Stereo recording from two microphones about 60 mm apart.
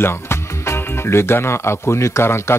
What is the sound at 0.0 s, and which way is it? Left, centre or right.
Speech, left.